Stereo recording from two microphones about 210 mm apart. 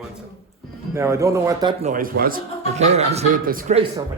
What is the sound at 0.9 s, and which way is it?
Speech, 15° right (ahead or behind).